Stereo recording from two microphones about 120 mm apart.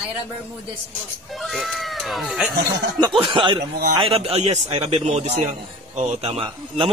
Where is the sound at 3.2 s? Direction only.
40° right (ahead or behind).